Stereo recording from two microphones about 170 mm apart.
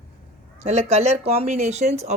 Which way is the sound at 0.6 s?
40° right (ahead or behind).